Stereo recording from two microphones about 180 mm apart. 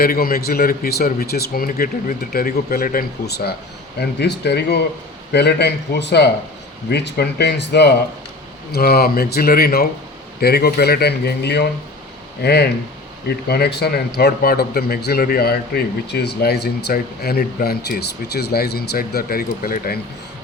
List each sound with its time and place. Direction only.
0.0 s a man's voice: 55° left (ahead or behind)